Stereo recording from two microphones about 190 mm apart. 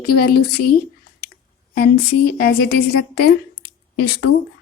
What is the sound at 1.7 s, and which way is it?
A woman's voice, 55° left (ahead or behind).